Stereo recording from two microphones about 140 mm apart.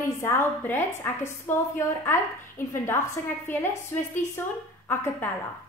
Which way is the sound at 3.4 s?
15° left (ahead or behind).